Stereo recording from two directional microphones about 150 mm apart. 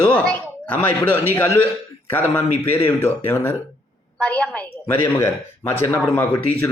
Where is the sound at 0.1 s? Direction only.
10° left (ahead or behind).